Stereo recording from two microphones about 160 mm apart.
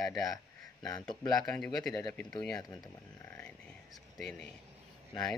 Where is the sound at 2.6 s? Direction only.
25° left (ahead or behind).